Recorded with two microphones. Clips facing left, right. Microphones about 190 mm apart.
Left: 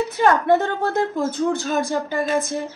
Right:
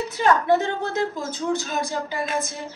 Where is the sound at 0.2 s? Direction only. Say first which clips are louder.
Left 2 dB; 55° left (ahead or behind).